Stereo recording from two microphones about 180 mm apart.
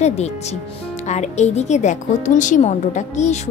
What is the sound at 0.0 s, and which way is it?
A woman's voice, 40° left (ahead or behind).